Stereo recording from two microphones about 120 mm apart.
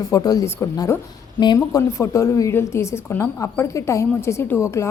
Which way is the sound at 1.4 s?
35° left (ahead or behind).